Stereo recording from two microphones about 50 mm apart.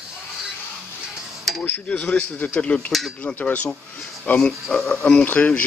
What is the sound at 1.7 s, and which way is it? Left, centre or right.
Speech, left.